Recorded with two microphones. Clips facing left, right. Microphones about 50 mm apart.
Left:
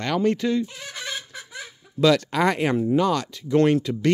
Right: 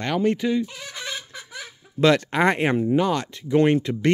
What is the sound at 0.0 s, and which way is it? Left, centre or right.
Speech, centre.